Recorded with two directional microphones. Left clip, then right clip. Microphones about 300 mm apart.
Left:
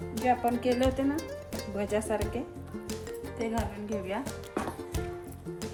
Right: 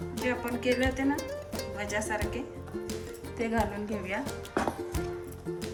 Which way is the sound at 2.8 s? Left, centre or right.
Centre.